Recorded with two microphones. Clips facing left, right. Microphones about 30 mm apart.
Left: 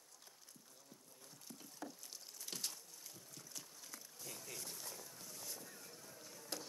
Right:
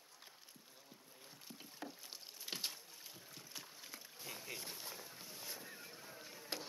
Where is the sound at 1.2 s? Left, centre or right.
Right.